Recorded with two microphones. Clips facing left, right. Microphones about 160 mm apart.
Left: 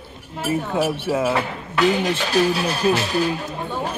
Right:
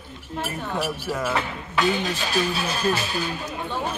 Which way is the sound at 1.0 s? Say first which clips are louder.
Left 6 dB; 25° left (ahead or behind).